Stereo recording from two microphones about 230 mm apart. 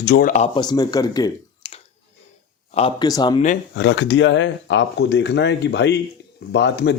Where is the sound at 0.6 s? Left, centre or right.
Centre.